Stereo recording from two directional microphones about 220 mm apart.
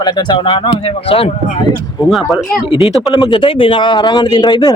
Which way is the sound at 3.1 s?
20° left (ahead or behind).